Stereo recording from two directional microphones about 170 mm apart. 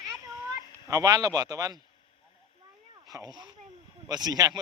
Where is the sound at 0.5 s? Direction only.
20° right (ahead or behind).